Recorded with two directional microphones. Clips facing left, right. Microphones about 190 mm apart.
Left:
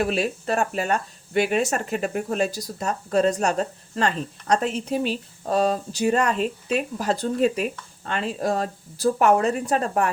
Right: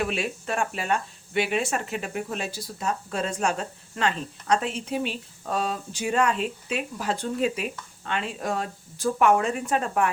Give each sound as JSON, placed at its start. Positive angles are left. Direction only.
{"t": 0.0, "sound": "speech", "side_deg": 40}